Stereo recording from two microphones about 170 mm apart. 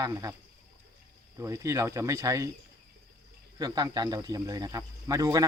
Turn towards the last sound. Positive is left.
turn(degrees=-20)  # may be behind; listen again after turning